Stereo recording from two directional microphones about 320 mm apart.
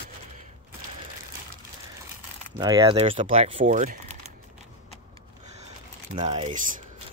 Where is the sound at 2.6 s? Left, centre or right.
Centre.